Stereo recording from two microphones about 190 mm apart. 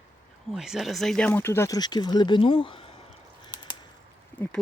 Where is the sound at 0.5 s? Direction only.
5° right (ahead or behind); by 2.8 s 25° left (ahead or behind).